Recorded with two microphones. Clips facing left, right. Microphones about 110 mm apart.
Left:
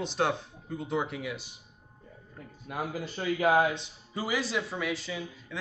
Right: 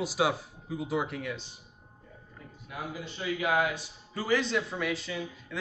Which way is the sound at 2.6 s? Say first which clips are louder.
Left 4 dB; 45° left (ahead or behind).